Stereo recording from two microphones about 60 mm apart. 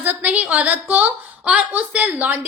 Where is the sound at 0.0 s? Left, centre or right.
Right.